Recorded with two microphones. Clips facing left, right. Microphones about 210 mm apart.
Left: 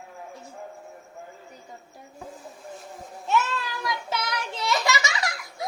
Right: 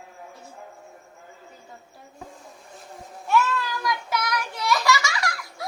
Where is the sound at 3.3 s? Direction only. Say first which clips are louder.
Right 3 dB; 20° left (ahead or behind).